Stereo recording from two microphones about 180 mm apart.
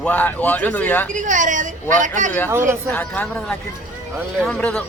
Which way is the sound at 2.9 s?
10° left (ahead or behind).